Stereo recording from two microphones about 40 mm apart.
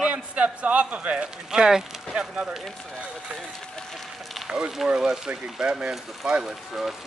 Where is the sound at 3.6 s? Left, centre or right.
Centre.